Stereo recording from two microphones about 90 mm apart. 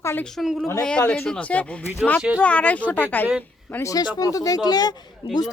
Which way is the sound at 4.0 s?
50° left (ahead or behind).